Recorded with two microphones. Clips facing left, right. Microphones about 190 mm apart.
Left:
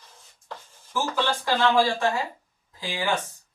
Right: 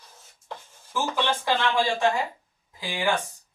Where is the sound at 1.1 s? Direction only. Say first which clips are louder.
Even; 20° right (ahead or behind).